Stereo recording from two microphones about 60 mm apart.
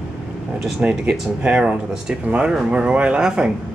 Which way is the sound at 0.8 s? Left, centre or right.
Centre.